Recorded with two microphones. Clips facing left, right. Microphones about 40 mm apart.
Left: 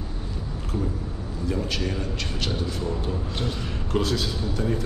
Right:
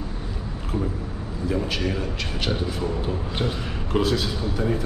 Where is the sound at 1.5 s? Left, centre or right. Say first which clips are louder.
Right 2 dB; centre.